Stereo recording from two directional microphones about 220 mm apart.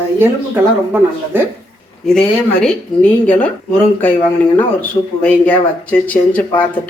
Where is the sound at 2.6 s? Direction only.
5° left (ahead or behind).